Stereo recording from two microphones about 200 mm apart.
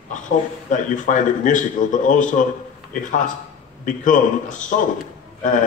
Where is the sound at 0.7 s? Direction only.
40° left (ahead or behind).